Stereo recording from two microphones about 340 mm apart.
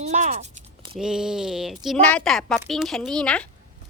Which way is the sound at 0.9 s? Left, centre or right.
Centre.